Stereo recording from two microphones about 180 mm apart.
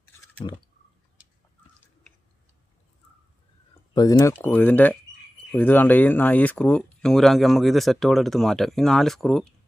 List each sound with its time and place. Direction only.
0.4 s speech: 30° left (ahead or behind)
3.9 s speech: 20° left (ahead or behind); by 9.5 s centre (ahead or behind)